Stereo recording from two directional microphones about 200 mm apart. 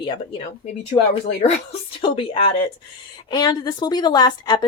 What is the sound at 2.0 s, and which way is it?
Speech, 25° left (ahead or behind).